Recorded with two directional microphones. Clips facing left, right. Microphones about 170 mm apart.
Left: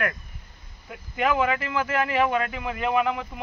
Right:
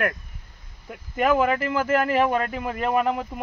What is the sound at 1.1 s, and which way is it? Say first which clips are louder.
Speech: right 3 dB; 40° right (ahead or behind).